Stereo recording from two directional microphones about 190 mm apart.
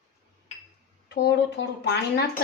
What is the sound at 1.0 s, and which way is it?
Speech, 65° left (ahead or behind).